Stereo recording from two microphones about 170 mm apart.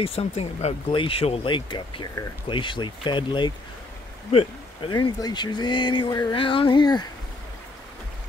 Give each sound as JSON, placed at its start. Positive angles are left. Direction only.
{"t": 0.0, "sound": "speech", "side_deg": 35}